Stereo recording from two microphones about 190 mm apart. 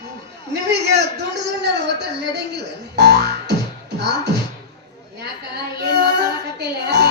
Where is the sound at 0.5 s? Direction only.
60° right (ahead or behind).